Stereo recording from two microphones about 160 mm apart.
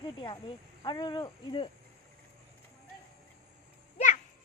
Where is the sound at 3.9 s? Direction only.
50° left (ahead or behind).